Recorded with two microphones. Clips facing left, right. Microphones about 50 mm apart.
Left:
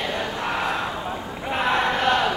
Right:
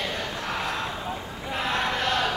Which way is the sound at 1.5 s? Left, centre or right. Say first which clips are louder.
Left 5 dB; left.